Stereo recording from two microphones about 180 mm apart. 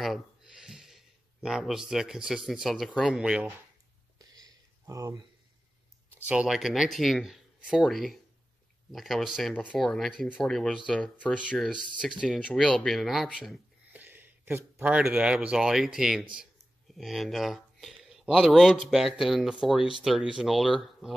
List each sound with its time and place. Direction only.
0.0 s speech: centre (ahead or behind)
4.2 s a sound: 20° right (ahead or behind)
6.1 s speech: 5° right (ahead or behind)